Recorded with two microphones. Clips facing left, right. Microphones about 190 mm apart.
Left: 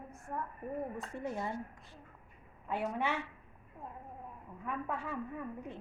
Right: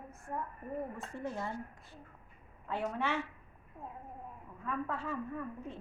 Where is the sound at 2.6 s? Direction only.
15° left (ahead or behind).